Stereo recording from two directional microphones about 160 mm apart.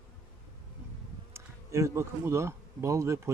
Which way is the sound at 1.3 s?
20° right (ahead or behind).